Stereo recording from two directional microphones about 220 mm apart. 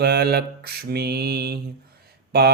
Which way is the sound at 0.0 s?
45° right (ahead or behind).